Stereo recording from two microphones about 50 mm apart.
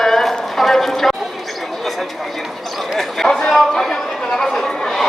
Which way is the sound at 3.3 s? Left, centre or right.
Centre.